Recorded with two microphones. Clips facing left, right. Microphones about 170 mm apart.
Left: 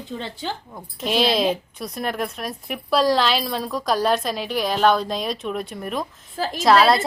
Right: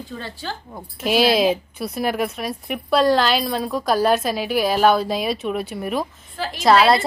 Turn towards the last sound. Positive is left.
turn(degrees=0)  # may be behind; listen again after turning